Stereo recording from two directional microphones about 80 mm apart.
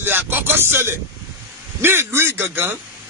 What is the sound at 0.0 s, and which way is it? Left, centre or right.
Music, right.